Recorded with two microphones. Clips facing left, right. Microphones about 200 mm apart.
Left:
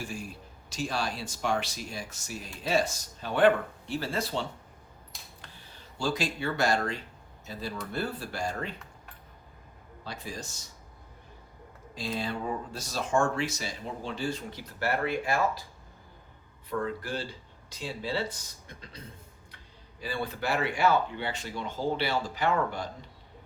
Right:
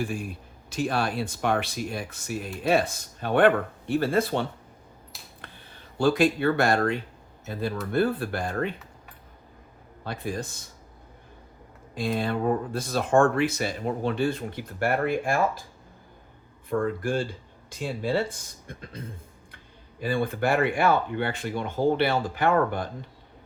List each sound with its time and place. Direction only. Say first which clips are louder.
0.0 s speech: right 7 dB; 55° right (ahead or behind)
10.0 s speech: right 8 dB; 55° right (ahead or behind)
11.9 s speech: right 6 dB; 55° right (ahead or behind)
16.6 s speech: right 6 dB; 50° right (ahead or behind)